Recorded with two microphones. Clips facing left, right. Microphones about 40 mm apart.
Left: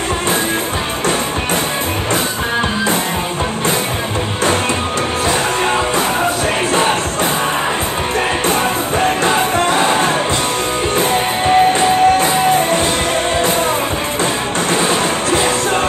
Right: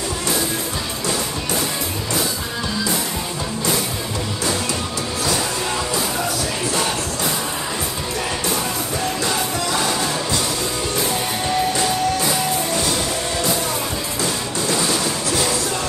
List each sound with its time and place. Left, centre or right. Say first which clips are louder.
5.7 s music: left 7 dB; left
8.5 s music: left 7 dB; left
14.7 s music: left 5 dB; left